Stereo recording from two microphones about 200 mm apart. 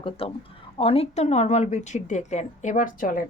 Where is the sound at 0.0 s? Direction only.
25° left (ahead or behind).